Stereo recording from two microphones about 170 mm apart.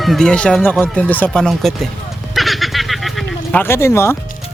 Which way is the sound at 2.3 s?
Centre (ahead or behind).